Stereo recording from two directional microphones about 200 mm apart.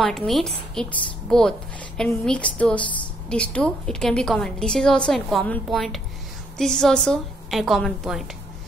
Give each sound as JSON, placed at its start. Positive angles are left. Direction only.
{"t": 0.0, "sound": "speech", "side_deg": 0}